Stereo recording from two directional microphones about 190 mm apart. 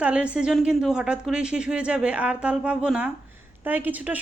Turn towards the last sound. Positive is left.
turn(degrees=-10)  # may be behind; listen again after turning